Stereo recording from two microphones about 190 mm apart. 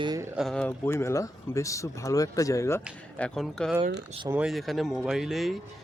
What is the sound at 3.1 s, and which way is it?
Speech, 5° left (ahead or behind).